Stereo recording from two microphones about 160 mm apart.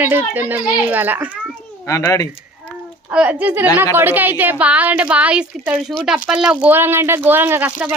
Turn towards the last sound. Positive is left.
turn(degrees=-10)  # may be behind; listen again after turning